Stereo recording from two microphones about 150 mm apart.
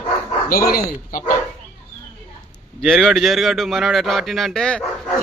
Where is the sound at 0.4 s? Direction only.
75° left (ahead or behind).